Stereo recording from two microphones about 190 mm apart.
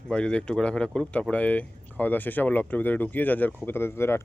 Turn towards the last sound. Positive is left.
turn(degrees=15)  # may be behind; listen again after turning